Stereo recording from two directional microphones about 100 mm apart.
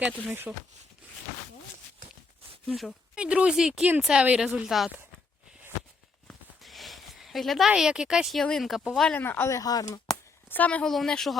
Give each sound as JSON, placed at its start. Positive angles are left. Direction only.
{"t": 0.3, "sound": "speech", "side_deg": -20}
{"t": 2.6, "sound": "speech", "side_deg": 0}
{"t": 3.2, "sound": "speech", "side_deg": -10}
{"t": 6.6, "sound": "a sound", "side_deg": 0}
{"t": 7.7, "sound": "speech", "side_deg": -5}
{"t": 9.1, "sound": "speech", "side_deg": 20}
{"t": 9.6, "sound": "speech", "side_deg": 35}
{"t": 10.5, "sound": "a woman's voice", "side_deg": 15}
{"t": 10.8, "sound": "speech", "side_deg": 5}